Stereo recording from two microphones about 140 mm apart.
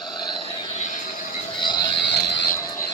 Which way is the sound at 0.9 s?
70° left (ahead or behind).